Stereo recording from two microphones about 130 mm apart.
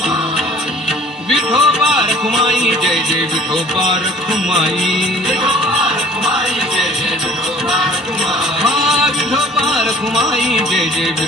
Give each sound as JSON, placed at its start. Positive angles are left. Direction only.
{"t": 1.3, "sound": "music", "side_deg": -5}
{"t": 4.5, "sound": "music", "side_deg": -5}
{"t": 8.6, "sound": "music", "side_deg": 0}